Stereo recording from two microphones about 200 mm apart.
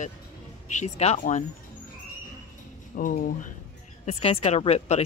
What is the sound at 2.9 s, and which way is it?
Speech, 40° left (ahead or behind).